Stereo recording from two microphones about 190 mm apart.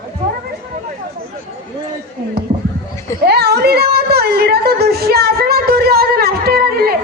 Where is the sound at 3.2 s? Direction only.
60° right (ahead or behind).